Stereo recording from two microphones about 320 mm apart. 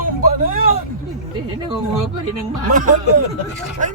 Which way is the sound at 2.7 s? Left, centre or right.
Right.